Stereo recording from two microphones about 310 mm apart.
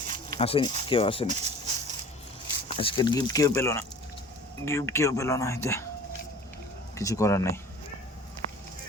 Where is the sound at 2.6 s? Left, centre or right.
Centre.